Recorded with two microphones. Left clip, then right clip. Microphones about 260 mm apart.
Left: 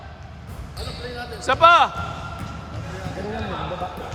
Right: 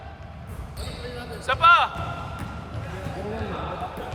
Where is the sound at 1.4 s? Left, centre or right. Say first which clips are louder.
Left 3 dB; left.